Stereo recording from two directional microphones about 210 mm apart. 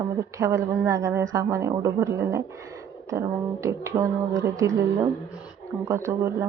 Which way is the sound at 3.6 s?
15° right (ahead or behind).